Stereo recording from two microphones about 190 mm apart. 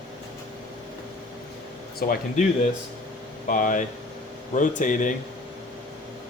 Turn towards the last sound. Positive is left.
turn(degrees=40)  # may be behind; listen again after turning